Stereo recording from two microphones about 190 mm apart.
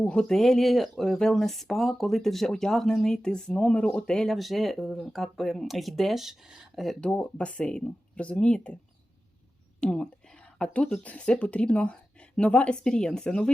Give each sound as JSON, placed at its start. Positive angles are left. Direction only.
{"t": 0.0, "sound": "speech", "side_deg": 5}
{"t": 9.8, "sound": "a woman's voice", "side_deg": 5}